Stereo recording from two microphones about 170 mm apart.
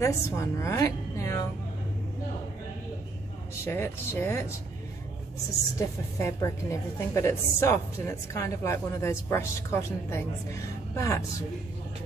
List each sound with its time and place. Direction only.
0.0 s a woman's voice: 15° left (ahead or behind)
3.6 s a woman's voice: 15° left (ahead or behind)
5.8 s a woman's voice: 15° left (ahead or behind)